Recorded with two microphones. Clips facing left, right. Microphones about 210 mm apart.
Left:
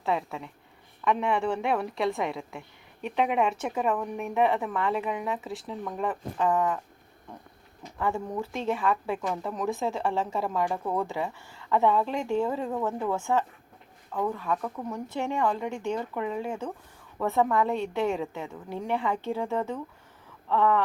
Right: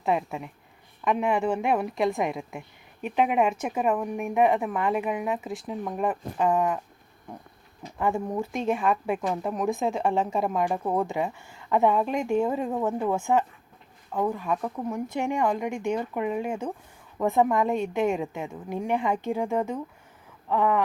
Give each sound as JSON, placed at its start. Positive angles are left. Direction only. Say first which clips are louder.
{"t": 0.0, "sound": "speech", "louder": "right 3 dB", "side_deg": -15}
{"t": 7.9, "sound": "speech", "louder": "right 3 dB", "side_deg": -15}